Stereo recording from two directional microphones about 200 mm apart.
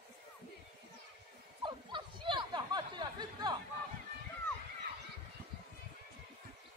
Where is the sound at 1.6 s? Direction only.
25° right (ahead or behind).